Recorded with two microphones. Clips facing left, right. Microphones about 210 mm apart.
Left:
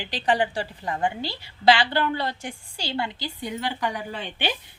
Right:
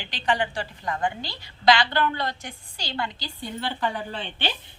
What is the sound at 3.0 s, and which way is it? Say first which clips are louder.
A woman's voice: left 2 dB; 15° left (ahead or behind).